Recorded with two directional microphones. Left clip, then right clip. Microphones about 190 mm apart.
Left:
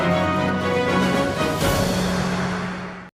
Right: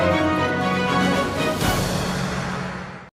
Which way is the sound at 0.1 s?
Centre (ahead or behind).